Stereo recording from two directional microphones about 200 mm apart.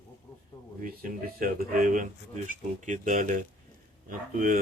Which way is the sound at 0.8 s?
45° right (ahead or behind).